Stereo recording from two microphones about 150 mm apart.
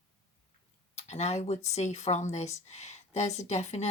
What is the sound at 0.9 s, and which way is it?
Speech, 50° left (ahead or behind).